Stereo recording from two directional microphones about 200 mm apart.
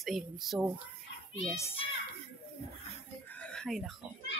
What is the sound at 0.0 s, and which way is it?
Speech, centre (ahead or behind).